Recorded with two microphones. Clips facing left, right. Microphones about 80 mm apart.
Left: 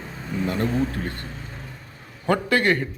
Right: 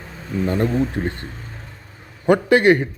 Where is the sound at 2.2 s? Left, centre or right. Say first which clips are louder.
Right 7 dB; centre.